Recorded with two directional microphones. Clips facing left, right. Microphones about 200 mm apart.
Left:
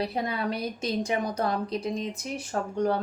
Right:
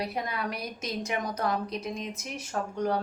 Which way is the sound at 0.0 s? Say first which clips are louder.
Left 3 dB; 30° left (ahead or behind).